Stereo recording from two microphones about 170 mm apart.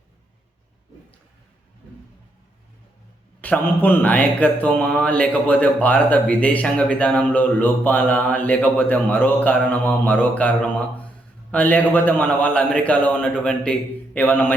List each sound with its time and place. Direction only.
3.4 s speech: 10° left (ahead or behind)